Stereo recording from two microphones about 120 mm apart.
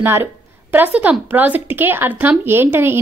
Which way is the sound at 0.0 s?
20° right (ahead or behind).